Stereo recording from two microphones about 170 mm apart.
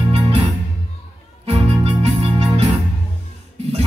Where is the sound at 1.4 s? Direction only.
35° right (ahead or behind).